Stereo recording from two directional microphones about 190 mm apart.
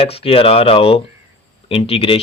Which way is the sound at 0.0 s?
30° left (ahead or behind).